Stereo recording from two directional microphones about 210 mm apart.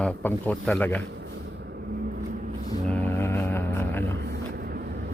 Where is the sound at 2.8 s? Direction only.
10° left (ahead or behind).